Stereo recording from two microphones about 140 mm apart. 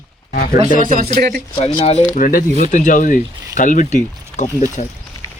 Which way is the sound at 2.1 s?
75° left (ahead or behind).